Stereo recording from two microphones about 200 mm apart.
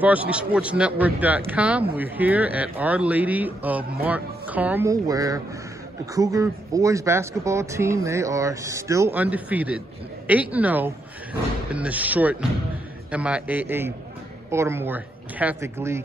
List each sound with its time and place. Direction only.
0.0 s a man's voice: 5° right (ahead or behind)